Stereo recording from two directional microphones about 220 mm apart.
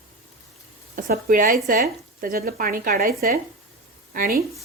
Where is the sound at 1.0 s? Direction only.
40° right (ahead or behind).